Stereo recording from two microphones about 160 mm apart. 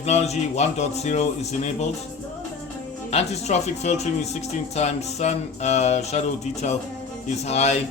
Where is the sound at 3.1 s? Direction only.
40° left (ahead or behind).